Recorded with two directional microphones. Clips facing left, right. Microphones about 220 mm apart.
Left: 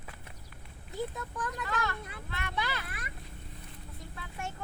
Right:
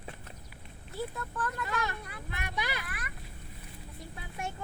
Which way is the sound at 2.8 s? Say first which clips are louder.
Right 1 dB; 25° left (ahead or behind).